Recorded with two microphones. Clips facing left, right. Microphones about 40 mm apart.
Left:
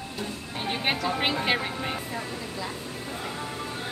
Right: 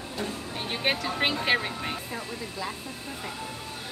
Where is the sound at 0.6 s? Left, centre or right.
Centre.